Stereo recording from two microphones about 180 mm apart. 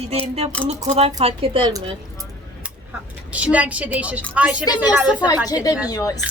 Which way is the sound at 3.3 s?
10° right (ahead or behind).